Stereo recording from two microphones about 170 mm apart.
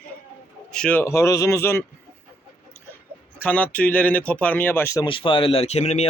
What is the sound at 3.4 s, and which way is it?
Speech, 10° left (ahead or behind).